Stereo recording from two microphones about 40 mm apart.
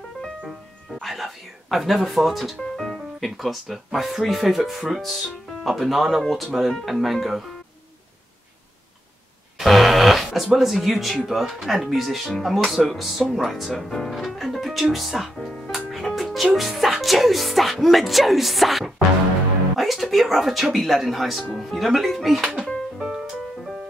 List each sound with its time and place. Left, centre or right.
1.0 s speech: centre
2.6 s music: centre
3.3 s speech: centre
9.6 s fart: centre
11.3 s speech: centre
15.9 s music: centre
19.8 s speech: centre
22.4 s speech: right
23.1 s music: centre